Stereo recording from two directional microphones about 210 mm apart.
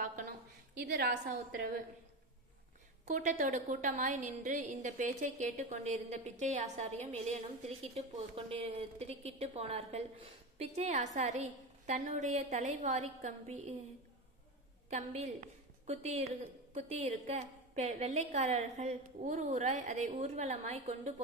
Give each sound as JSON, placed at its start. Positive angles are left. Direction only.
{"t": 0.9, "sound": "a woman's voice", "side_deg": -50}
{"t": 3.1, "sound": "a woman's voice", "side_deg": -35}
{"t": 14.9, "sound": "a woman's voice", "side_deg": -35}